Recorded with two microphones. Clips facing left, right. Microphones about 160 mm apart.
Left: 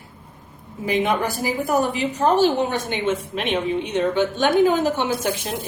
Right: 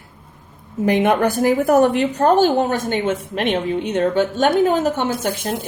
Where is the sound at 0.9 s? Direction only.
70° right (ahead or behind); by 5.1 s 50° right (ahead or behind).